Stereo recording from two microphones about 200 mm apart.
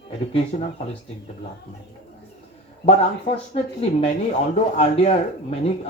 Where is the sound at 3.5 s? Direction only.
30° left (ahead or behind).